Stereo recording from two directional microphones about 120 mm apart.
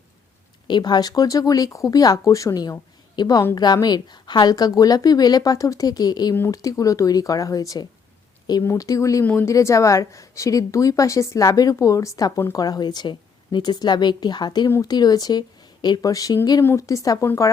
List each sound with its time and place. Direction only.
0.7 s a woman's voice: 35° left (ahead or behind)
9.2 s a woman's voice: 15° left (ahead or behind)